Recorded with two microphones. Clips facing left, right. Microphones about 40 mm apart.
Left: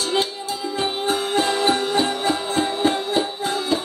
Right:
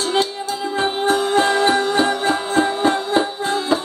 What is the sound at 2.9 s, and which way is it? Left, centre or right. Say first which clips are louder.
Music: right 3 dB; centre.